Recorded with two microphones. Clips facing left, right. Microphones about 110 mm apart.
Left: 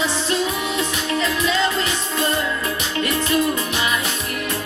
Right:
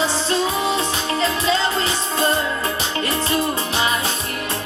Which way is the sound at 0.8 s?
30° right (ahead or behind).